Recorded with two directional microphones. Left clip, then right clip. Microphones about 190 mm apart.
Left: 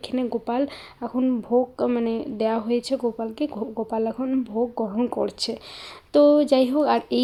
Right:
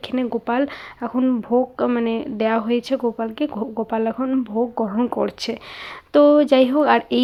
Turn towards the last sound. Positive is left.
turn(degrees=-10)  # may be behind; listen again after turning